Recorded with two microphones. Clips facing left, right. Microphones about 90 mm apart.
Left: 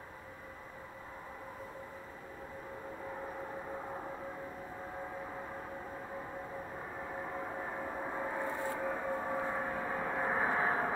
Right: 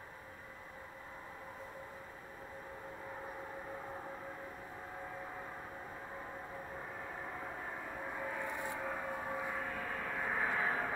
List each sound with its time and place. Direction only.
7.2 s vehicle: 15° left (ahead or behind)
8.7 s gong: 10° left (ahead or behind); by 10.9 s 30° left (ahead or behind)